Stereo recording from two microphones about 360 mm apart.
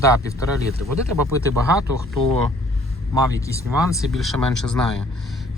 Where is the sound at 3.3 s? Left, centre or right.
Centre.